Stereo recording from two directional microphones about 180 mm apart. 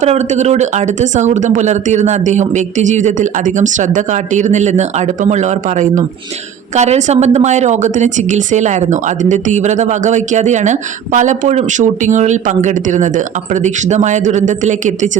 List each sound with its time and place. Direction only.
0.0 s a woman's voice: 40° right (ahead or behind)